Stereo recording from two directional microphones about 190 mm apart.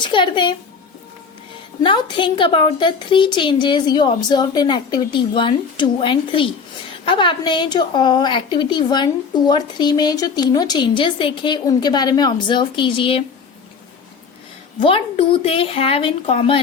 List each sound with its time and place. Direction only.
0.0 s a woman's voice: 25° left (ahead or behind)
1.8 s a woman's voice: 25° left (ahead or behind)
14.8 s a woman's voice: 30° left (ahead or behind)